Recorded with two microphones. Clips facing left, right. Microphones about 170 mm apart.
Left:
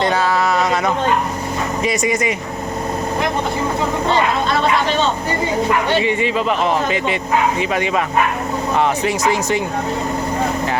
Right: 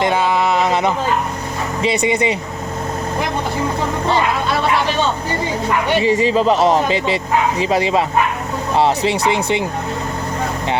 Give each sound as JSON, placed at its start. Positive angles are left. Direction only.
{"t": 0.0, "sound": "a sound", "side_deg": -20}
{"t": 1.8, "sound": "speech", "side_deg": -25}
{"t": 6.0, "sound": "speech", "side_deg": -35}